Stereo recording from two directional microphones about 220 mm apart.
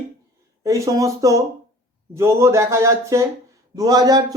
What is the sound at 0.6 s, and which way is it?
Speech, 15° right (ahead or behind).